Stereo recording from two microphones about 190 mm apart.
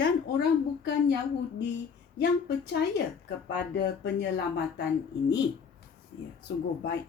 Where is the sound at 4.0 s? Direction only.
60° left (ahead or behind).